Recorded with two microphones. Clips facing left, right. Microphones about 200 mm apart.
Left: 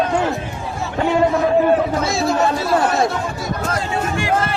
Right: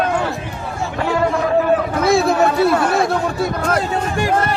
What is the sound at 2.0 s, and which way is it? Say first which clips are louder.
Speech: right 4 dB; 60° right (ahead or behind).